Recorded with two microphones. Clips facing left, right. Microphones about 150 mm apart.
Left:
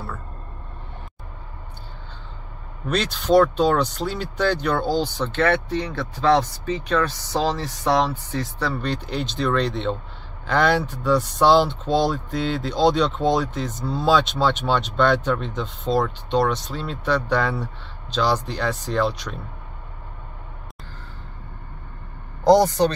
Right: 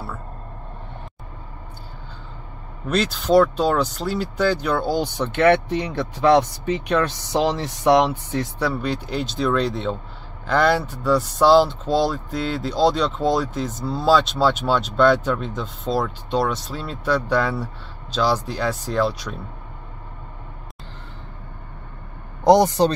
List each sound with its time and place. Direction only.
2.9 s speech: 5° right (ahead or behind)
22.4 s speech: 20° right (ahead or behind)